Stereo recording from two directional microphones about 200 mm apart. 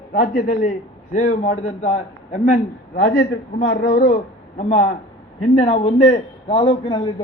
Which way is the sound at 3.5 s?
50° left (ahead or behind).